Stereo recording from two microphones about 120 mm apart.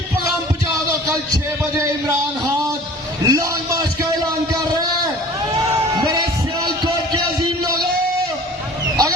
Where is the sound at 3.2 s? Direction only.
30° right (ahead or behind).